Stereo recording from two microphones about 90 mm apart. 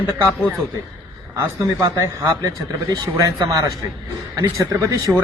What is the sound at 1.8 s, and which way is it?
Speech, 35° right (ahead or behind).